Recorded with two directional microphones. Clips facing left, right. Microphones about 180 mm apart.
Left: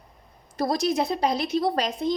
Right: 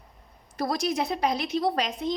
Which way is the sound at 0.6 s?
30° left (ahead or behind).